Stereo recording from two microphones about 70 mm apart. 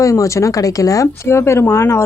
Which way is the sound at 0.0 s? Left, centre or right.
Left.